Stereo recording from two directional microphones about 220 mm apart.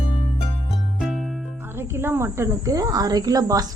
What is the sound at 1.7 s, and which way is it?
Speech, 10° right (ahead or behind).